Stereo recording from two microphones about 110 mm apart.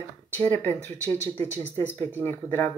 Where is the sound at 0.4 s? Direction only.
15° left (ahead or behind).